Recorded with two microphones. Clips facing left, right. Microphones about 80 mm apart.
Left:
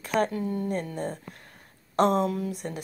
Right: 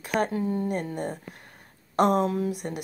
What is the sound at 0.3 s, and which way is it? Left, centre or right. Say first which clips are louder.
Speech: right 2 dB; right.